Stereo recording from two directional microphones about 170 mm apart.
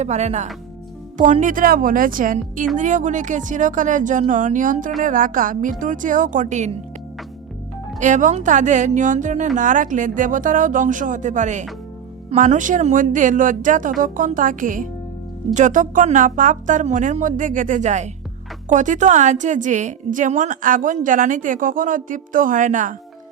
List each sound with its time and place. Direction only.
0.0 s a woman's voice: 40° right (ahead or behind)
7.9 s a woman's voice: 45° right (ahead or behind)